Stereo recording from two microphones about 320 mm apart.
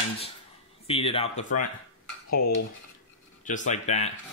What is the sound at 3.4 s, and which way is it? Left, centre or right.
Speech, left.